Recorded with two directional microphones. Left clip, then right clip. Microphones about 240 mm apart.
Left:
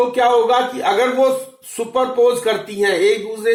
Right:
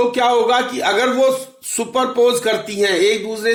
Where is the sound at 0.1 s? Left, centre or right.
Right.